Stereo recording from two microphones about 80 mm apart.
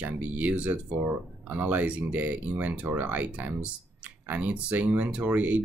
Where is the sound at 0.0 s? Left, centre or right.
Centre.